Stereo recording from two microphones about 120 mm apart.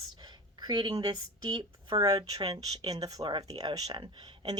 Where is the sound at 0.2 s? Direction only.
35° right (ahead or behind).